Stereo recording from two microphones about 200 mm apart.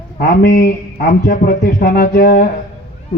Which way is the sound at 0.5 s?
45° left (ahead or behind).